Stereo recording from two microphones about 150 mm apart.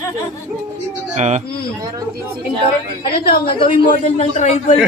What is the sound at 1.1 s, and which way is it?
Speech, 50° right (ahead or behind).